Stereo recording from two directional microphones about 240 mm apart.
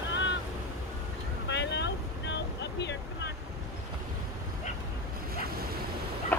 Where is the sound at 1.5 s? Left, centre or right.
Left.